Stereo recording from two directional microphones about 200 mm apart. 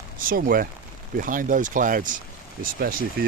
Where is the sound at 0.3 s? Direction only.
45° right (ahead or behind).